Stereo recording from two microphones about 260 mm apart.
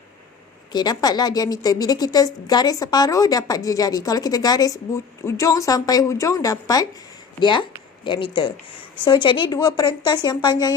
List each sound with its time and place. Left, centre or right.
0.7 s a woman's voice: centre